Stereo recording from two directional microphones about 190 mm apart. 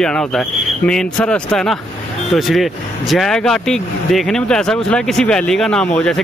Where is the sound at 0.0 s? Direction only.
5° left (ahead or behind).